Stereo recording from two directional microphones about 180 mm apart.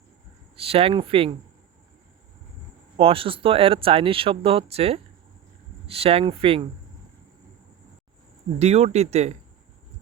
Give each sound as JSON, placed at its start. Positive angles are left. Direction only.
{"t": 0.5, "sound": "speech", "side_deg": -35}
{"t": 3.0, "sound": "speech", "side_deg": -30}
{"t": 8.5, "sound": "speech", "side_deg": -35}